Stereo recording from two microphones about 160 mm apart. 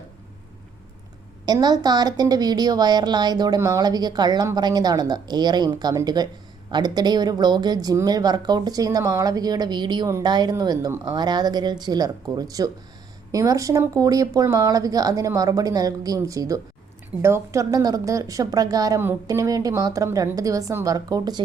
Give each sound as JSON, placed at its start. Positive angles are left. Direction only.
{"t": 1.5, "sound": "speech", "side_deg": -25}